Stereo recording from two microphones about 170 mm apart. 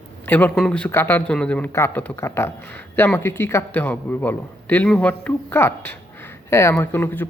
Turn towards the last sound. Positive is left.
turn(degrees=10)  # may be behind; listen again after turning